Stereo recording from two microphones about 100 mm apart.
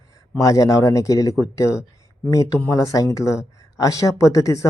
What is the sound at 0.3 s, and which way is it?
Speech, 35° left (ahead or behind).